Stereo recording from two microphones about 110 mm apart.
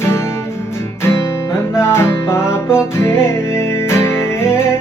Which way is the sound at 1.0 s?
25° left (ahead or behind).